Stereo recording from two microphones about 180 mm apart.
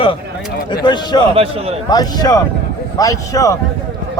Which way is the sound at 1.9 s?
20° left (ahead or behind).